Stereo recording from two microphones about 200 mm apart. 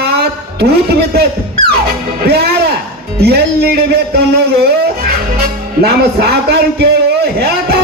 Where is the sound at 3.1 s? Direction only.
55° right (ahead or behind).